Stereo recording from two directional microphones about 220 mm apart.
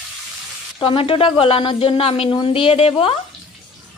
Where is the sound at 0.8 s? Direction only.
25° left (ahead or behind).